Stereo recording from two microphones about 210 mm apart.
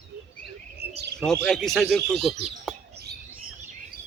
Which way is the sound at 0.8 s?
50° right (ahead or behind).